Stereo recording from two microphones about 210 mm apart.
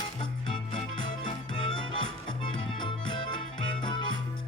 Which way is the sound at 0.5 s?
20° left (ahead or behind).